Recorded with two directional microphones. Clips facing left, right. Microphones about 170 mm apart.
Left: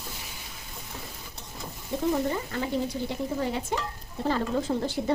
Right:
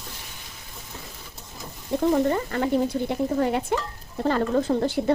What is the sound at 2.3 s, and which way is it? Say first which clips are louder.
Stir: right 6 dB; 60° right (ahead or behind).